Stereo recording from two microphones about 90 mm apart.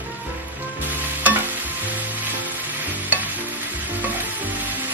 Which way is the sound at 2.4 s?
20° right (ahead or behind).